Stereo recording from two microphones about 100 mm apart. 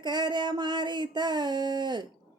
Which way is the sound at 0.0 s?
45° right (ahead or behind).